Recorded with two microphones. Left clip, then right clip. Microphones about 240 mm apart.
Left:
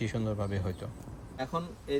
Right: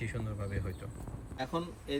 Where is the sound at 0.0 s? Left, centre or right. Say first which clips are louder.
Left 7 dB; centre.